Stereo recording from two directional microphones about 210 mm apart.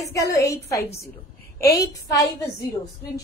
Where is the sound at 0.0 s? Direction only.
15° left (ahead or behind).